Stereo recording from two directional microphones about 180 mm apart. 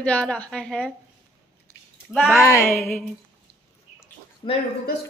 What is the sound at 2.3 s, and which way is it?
Speech, 15° left (ahead or behind).